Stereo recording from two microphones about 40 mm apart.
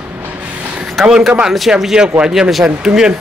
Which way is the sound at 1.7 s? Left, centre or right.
Centre.